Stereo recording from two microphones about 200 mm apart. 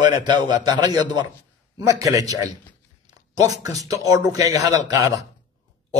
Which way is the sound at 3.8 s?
15° right (ahead or behind).